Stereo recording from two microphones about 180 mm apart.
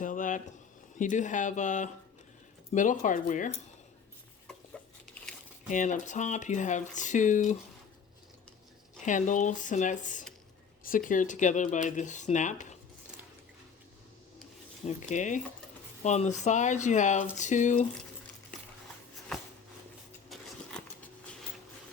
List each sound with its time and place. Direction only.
0.0 s a sound: 50° left (ahead or behind)
0.9 s speech: 45° left (ahead or behind)
5.6 s speech: 45° left (ahead or behind)
9.0 s speech: 45° left (ahead or behind)
14.8 s speech: 45° left (ahead or behind)
20.3 s a sound: 5° left (ahead or behind)